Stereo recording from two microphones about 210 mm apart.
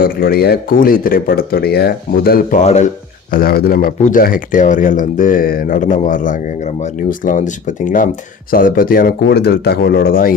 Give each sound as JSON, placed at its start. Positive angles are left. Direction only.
{"t": 0.0, "sound": "speech", "side_deg": 45}
{"t": 3.3, "sound": "speech", "side_deg": 45}